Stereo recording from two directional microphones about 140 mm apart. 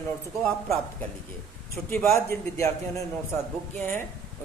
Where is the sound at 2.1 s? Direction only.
20° left (ahead or behind).